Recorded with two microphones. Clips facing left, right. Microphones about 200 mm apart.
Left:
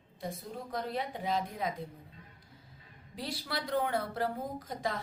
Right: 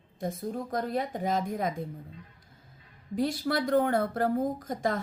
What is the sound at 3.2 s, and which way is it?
A woman's voice, 50° right (ahead or behind).